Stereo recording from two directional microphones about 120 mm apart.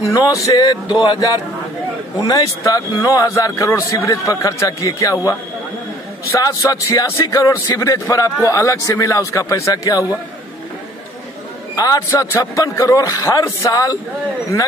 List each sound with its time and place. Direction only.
0.1 s a man's voice: 30° left (ahead or behind)
6.3 s a man's voice: 30° left (ahead or behind)
11.7 s a man's voice: 30° left (ahead or behind)